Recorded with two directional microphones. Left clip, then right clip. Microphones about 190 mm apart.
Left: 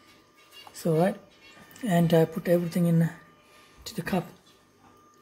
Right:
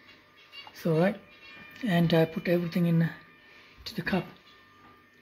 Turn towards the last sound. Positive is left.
turn(degrees=5)  # may be behind; listen again after turning